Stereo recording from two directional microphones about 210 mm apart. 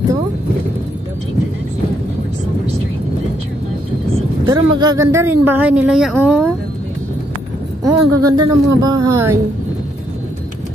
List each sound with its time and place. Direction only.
4.5 s speech: 20° right (ahead or behind)
7.8 s speech: 15° right (ahead or behind)